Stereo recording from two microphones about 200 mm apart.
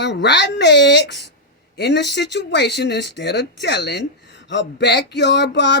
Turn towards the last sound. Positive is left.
turn(degrees=60)  # may be behind; listen again after turning